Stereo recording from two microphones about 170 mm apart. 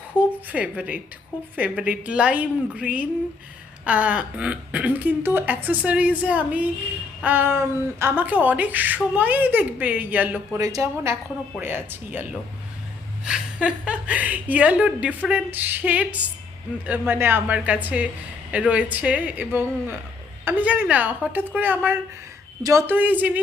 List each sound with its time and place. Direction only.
0.2 s a woman's voice: 10° right (ahead or behind)